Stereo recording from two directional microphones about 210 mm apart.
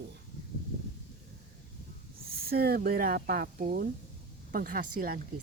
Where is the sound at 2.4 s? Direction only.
50° right (ahead or behind).